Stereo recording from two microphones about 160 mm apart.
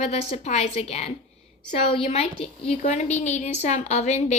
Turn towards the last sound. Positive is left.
turn(degrees=45)  # may be behind; listen again after turning